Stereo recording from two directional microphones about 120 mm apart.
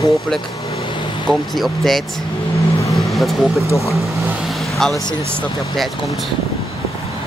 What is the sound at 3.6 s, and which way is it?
Speech, 25° left (ahead or behind).